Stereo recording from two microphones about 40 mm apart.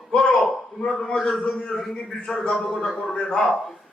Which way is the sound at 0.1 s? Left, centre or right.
Centre.